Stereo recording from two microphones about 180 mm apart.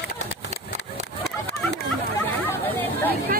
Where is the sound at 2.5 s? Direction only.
10° left (ahead or behind).